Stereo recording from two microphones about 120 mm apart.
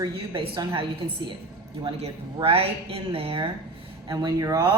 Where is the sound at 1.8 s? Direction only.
55° right (ahead or behind).